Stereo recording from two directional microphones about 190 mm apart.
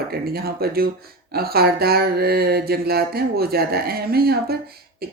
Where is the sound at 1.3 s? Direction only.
55° right (ahead or behind).